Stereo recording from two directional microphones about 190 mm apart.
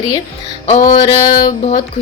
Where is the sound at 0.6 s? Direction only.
40° left (ahead or behind).